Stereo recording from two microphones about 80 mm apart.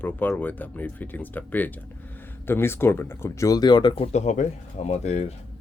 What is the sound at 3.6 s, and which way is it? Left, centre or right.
Speech, left.